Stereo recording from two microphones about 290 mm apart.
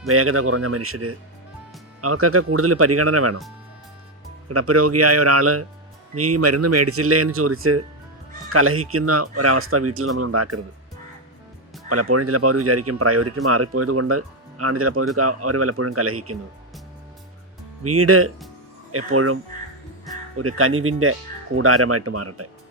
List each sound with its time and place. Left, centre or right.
0.1 s speech: right
4.4 s speech: right
11.9 s speech: right
17.8 s speech: right
20.6 s speech: right